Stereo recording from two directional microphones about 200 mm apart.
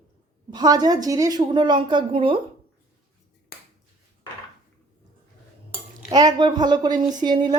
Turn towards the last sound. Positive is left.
turn(degrees=-20)  # may be behind; listen again after turning